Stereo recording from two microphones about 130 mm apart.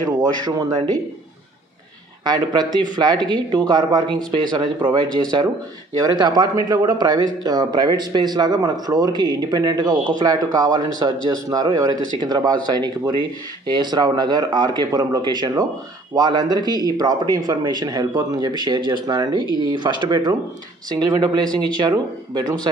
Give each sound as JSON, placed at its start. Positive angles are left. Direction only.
{"t": 0.2, "sound": "speech", "side_deg": -30}
{"t": 2.2, "sound": "speech", "side_deg": -30}